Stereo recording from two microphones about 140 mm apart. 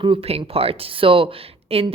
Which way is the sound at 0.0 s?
40° right (ahead or behind).